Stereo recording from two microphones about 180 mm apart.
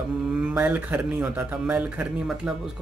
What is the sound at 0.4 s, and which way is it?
A man's voice, 5° right (ahead or behind).